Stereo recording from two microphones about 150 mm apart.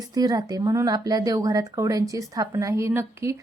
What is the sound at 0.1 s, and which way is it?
A woman's voice, 25° right (ahead or behind).